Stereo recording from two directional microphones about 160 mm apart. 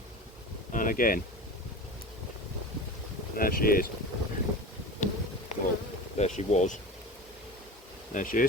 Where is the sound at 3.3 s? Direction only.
65° left (ahead or behind).